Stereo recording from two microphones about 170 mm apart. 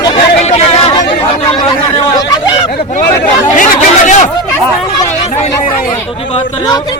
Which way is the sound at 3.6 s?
45° left (ahead or behind).